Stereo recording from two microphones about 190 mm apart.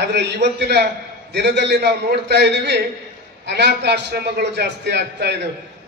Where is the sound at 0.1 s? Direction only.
60° right (ahead or behind).